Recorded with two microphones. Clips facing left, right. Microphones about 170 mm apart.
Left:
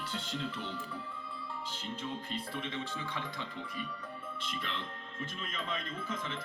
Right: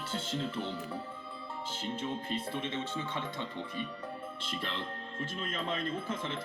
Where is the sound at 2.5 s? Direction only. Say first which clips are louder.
Right 3 dB; 25° right (ahead or behind).